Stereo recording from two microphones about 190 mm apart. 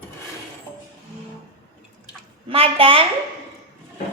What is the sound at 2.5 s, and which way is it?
Speech, 30° right (ahead or behind).